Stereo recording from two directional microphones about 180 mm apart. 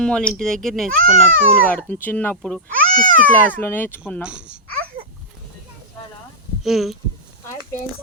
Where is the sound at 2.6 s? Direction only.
50° right (ahead or behind).